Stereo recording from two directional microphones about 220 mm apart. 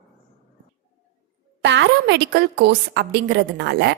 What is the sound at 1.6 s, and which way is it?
A woman's voice, 55° right (ahead or behind).